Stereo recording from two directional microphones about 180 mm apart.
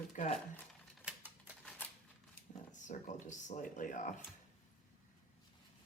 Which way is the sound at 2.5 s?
45° left (ahead or behind).